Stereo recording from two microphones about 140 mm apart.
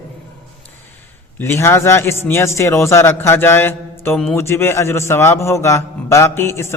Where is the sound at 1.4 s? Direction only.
20° left (ahead or behind).